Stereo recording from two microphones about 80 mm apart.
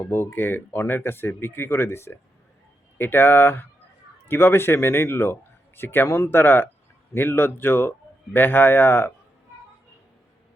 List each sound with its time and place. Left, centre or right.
0.1 s speech: left